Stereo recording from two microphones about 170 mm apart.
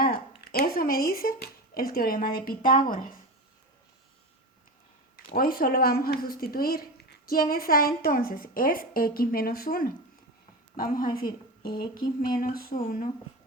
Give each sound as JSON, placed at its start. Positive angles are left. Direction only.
{"t": 0.0, "sound": "speech", "side_deg": 60}
{"t": 5.1, "sound": "a woman's voice", "side_deg": 60}
{"t": 11.6, "sound": "a sound", "side_deg": 25}
{"t": 12.4, "sound": "a woman's voice", "side_deg": 60}